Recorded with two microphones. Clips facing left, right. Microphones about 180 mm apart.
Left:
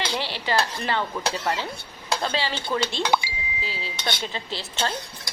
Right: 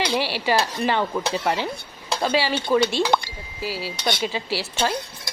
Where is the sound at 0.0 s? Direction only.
15° right (ahead or behind).